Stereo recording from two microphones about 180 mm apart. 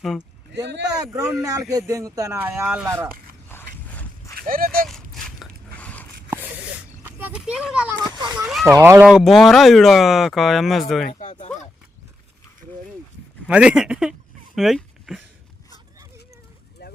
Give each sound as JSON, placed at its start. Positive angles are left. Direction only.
{"t": 0.5, "sound": "speech", "side_deg": -70}
{"t": 0.9, "sound": "speech", "side_deg": -20}
{"t": 4.4, "sound": "speech", "side_deg": -50}
{"t": 4.9, "sound": "a sound", "side_deg": 0}
{"t": 7.2, "sound": "speech", "side_deg": -10}
{"t": 8.6, "sound": "speech", "side_deg": -15}
{"t": 9.0, "sound": "speech", "side_deg": 0}
{"t": 11.1, "sound": "speech", "side_deg": 40}
{"t": 13.5, "sound": "speech", "side_deg": -5}
{"t": 16.8, "sound": "a sound", "side_deg": 65}